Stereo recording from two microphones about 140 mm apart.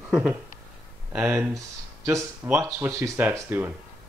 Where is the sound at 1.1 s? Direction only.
15° right (ahead or behind).